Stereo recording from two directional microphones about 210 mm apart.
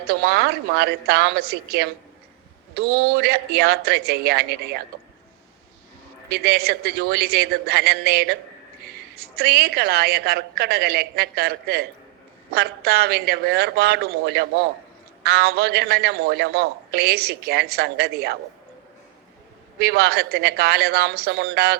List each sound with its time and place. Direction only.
0.0 s a man's voice: 50° right (ahead or behind)
6.2 s a man's voice: 50° right (ahead or behind)
19.8 s a man's voice: 50° right (ahead or behind)